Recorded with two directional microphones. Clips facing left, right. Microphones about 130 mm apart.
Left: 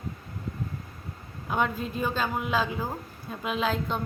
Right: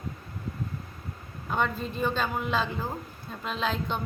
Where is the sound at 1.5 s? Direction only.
5° left (ahead or behind).